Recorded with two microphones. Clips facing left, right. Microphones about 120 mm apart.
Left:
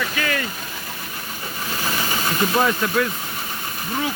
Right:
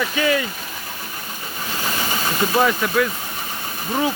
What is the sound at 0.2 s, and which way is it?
Speech, 15° right (ahead or behind).